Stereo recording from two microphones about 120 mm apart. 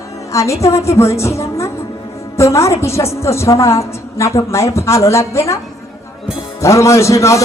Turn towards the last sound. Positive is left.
turn(degrees=25)  # may be behind; listen again after turning